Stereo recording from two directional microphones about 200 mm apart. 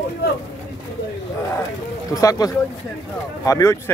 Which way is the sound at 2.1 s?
20° left (ahead or behind).